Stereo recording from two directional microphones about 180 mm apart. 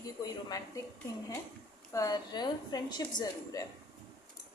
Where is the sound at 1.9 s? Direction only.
20° left (ahead or behind).